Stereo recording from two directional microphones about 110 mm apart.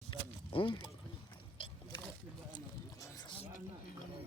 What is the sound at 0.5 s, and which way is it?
Speech, 45° left (ahead or behind).